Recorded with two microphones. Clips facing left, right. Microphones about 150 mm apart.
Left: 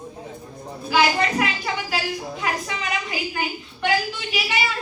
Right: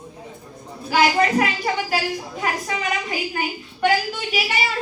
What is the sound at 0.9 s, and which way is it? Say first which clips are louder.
A woman's voice: right 2 dB; 45° right (ahead or behind).